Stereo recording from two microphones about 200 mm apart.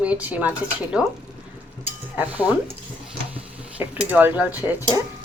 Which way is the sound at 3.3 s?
5° right (ahead or behind).